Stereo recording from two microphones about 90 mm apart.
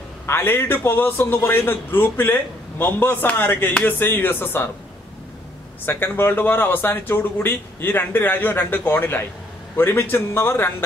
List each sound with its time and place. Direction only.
0.3 s a man's voice: 25° left (ahead or behind)
5.9 s a man's voice: 25° left (ahead or behind)